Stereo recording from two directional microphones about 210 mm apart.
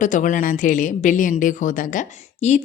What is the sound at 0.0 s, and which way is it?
A woman's voice, 35° left (ahead or behind).